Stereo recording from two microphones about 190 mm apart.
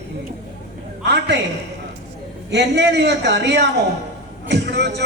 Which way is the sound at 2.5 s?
65° right (ahead or behind).